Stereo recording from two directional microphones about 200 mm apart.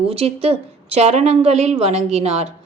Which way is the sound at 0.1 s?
30° right (ahead or behind).